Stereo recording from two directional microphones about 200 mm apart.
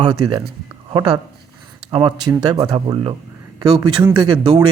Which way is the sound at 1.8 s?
25° right (ahead or behind).